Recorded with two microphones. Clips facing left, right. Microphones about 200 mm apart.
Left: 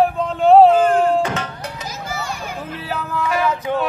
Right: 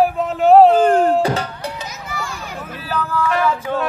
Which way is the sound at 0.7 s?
40° right (ahead or behind).